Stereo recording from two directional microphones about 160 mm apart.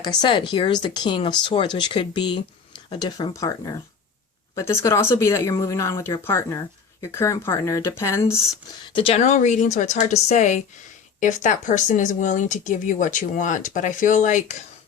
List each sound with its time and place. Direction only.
0.0 s speech: 25° left (ahead or behind)
8.9 s speech: 30° left (ahead or behind)
9.1 s speech: 50° left (ahead or behind)